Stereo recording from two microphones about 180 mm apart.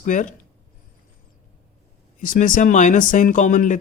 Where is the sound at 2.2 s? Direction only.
50° left (ahead or behind).